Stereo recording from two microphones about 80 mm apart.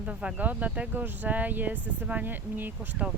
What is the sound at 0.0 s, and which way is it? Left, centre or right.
Speech, centre.